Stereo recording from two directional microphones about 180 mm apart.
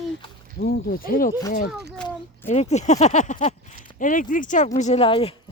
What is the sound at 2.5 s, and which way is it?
Speech, 40° left (ahead or behind).